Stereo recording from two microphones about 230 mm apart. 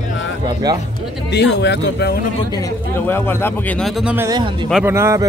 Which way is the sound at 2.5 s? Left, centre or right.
Centre.